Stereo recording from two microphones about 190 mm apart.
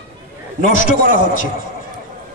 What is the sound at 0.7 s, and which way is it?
Speech, 45° left (ahead or behind).